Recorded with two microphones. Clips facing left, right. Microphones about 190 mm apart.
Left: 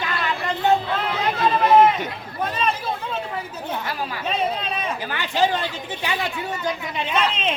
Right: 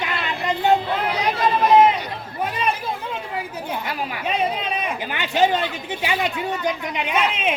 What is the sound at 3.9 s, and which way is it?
Speech, 15° right (ahead or behind).